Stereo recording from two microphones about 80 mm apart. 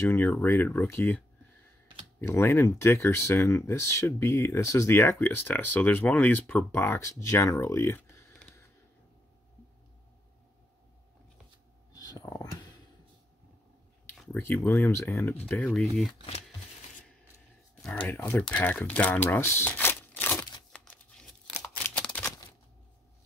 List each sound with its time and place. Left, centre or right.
0.0 s speech: left
2.2 s speech: left
11.9 s a sound: left
12.2 s speech: left
14.3 s speech: left
15.5 s speech: centre
17.9 s speech: left
20.7 s a sound: centre
21.9 s typewriter: centre